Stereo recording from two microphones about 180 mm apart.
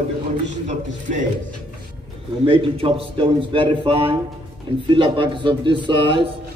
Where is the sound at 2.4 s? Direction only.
30° right (ahead or behind).